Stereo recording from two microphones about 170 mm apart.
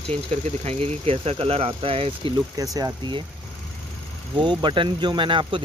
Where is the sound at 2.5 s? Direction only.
20° right (ahead or behind).